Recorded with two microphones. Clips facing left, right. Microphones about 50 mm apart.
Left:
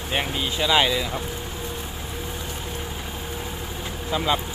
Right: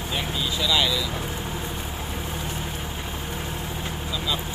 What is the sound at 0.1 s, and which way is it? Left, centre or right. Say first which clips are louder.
Vehicle: left 3 dB; left.